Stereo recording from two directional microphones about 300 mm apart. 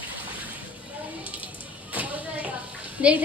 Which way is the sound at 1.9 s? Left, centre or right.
Centre.